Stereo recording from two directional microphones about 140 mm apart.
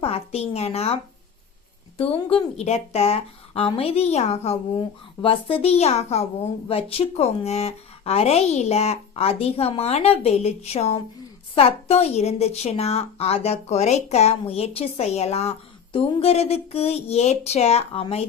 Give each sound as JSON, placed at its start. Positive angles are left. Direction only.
{"t": 0.0, "sound": "a woman's voice", "side_deg": 45}
{"t": 2.0, "sound": "a woman's voice", "side_deg": 45}